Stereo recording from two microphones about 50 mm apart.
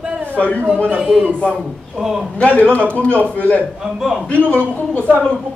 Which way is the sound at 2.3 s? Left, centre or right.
Left.